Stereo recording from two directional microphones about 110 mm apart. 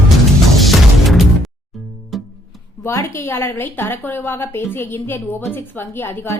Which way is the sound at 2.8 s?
25° left (ahead or behind).